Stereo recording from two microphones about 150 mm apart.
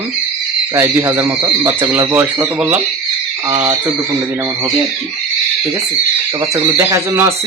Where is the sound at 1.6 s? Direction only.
20° right (ahead or behind).